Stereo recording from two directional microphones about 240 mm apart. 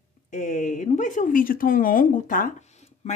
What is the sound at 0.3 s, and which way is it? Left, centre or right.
A woman's voice, left.